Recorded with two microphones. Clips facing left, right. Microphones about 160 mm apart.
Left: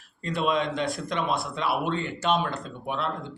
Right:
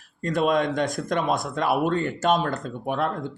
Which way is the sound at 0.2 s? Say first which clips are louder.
Right 4 dB; 45° right (ahead or behind).